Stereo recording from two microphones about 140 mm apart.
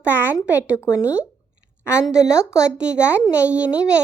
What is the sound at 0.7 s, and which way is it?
Speech, 20° left (ahead or behind).